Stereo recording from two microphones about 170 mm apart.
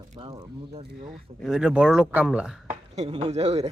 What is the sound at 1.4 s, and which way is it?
Speech, 5° right (ahead or behind).